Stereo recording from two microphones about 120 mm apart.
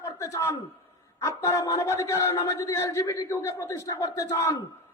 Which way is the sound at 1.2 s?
25° left (ahead or behind).